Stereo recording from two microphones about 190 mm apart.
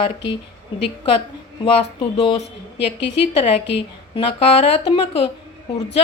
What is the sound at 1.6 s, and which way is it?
A woman's voice, 30° left (ahead or behind).